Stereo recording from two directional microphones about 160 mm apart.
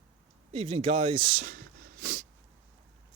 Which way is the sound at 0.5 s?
40° right (ahead or behind).